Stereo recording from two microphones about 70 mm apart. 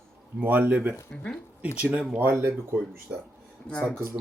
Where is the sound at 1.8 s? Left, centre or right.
Right.